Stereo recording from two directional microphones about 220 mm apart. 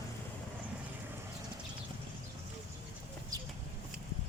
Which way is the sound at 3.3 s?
15° right (ahead or behind).